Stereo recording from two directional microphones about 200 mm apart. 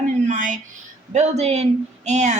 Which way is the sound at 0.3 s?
40° right (ahead or behind).